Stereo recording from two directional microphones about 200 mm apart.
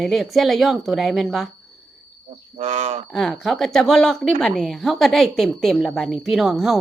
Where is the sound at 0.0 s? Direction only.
Centre (ahead or behind).